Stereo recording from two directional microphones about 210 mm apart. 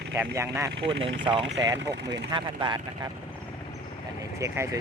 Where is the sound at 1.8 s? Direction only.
55° right (ahead or behind).